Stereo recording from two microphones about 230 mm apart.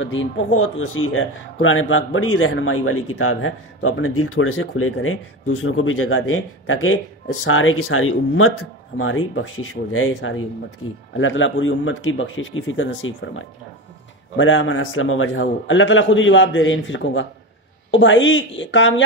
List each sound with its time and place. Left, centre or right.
0.0 s a man's voice: left